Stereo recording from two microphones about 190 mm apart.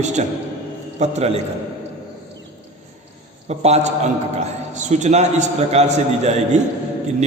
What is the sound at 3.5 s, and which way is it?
A man's voice, 35° right (ahead or behind).